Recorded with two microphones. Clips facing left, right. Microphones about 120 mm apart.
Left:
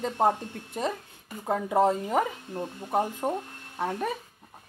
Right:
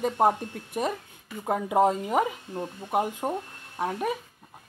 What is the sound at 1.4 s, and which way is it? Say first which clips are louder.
Speech: right 1 dB; 15° right (ahead or behind).